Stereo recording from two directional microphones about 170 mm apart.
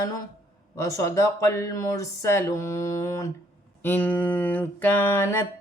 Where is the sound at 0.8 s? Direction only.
20° left (ahead or behind).